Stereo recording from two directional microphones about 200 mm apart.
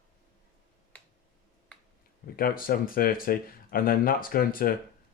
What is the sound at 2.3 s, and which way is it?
Speech, 45° left (ahead or behind).